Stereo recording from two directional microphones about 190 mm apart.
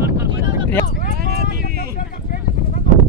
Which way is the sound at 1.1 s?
55° right (ahead or behind).